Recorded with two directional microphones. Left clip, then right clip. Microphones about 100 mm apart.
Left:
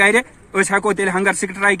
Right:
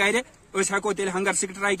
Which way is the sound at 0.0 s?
20° right (ahead or behind).